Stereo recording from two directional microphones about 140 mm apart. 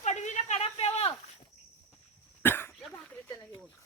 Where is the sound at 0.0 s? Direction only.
55° left (ahead or behind).